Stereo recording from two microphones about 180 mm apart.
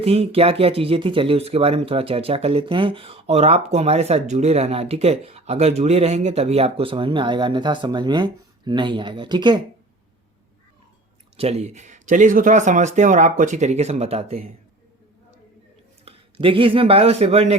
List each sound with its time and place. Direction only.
0.0 s speech: 35° right (ahead or behind)
11.3 s speech: 35° right (ahead or behind)
16.0 s speech: 30° right (ahead or behind)